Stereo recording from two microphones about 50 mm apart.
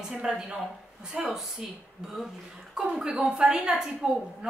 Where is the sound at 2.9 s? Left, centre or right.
Centre.